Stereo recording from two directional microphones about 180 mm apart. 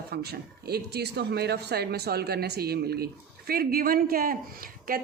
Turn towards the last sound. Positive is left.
turn(degrees=-50)  # may be behind; listen again after turning